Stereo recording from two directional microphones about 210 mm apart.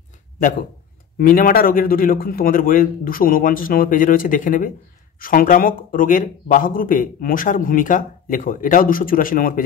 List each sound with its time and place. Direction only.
1.1 s speech: 40° left (ahead or behind)